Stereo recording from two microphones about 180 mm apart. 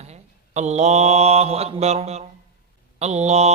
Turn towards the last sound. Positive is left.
turn(degrees=-35)  # may be behind; listen again after turning